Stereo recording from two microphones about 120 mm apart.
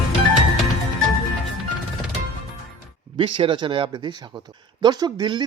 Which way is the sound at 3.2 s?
45° right (ahead or behind).